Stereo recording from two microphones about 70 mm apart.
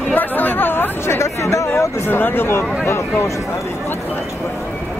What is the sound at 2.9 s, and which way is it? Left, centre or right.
Speech, left.